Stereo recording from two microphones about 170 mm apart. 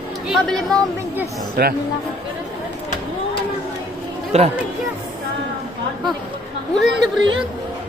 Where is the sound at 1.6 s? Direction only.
70° right (ahead or behind).